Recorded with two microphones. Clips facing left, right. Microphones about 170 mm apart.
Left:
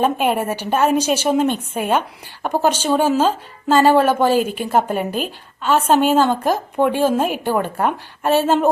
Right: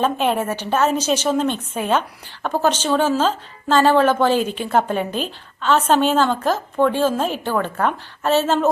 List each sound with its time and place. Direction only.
0.0 s a woman's voice: 10° left (ahead or behind)